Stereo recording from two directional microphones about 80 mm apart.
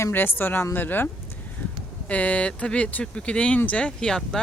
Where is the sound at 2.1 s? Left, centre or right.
Centre.